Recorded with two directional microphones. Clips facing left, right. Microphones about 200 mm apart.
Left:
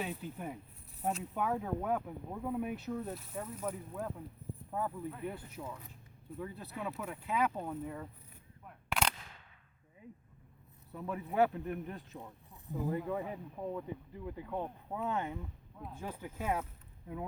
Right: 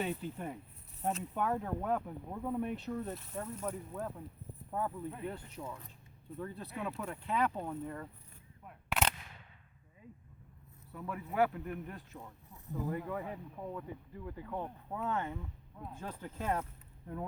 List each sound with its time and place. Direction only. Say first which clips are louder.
0.0 s speech: right 2 dB; centre (ahead or behind)
8.6 s single-lens reflex camera: right 1 dB; 5° right (ahead or behind)
10.9 s speech: left 2 dB; 20° left (ahead or behind)